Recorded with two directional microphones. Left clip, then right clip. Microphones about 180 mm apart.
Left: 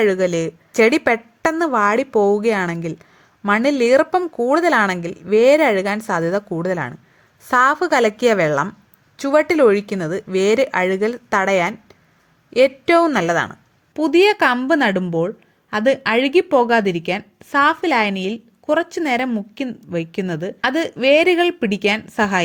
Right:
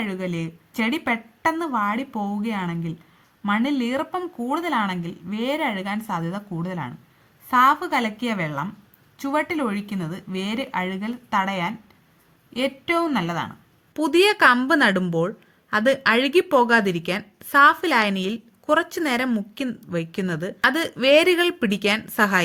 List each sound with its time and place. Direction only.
0.0 s a woman's voice: 45° left (ahead or behind)
13.9 s speech: 15° left (ahead or behind)